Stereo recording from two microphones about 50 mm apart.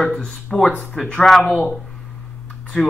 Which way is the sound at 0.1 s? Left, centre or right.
Centre.